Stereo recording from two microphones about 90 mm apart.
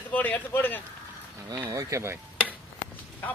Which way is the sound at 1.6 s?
35° right (ahead or behind).